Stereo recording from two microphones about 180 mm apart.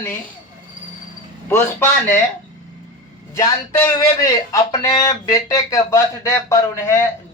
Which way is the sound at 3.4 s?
15° left (ahead or behind).